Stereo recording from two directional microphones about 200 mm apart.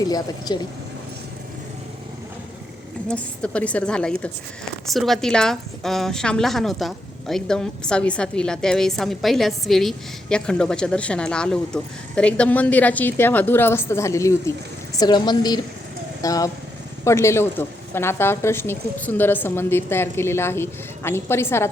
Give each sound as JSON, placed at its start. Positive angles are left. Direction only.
{"t": 0.0, "sound": "a woman's voice", "side_deg": 20}
{"t": 3.1, "sound": "a woman's voice", "side_deg": 5}